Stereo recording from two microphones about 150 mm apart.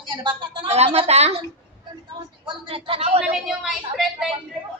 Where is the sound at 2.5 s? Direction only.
40° right (ahead or behind).